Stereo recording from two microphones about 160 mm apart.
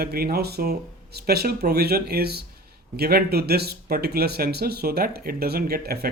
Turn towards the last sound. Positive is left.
turn(degrees=-70)  # may be behind; listen again after turning